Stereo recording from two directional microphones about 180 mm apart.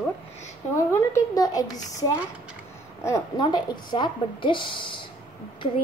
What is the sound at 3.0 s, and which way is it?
Speech, 20° left (ahead or behind).